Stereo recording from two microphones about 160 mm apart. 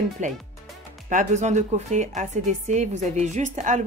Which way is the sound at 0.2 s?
50° right (ahead or behind).